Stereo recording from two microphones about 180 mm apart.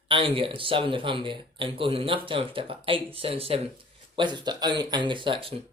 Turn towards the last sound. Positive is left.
turn(degrees=-30)  # may be behind; listen again after turning